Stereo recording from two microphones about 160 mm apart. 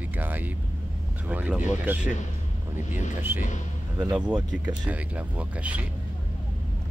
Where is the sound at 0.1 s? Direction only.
10° right (ahead or behind).